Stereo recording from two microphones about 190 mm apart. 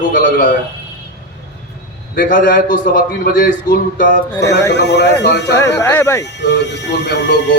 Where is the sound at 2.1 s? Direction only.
45° left (ahead or behind).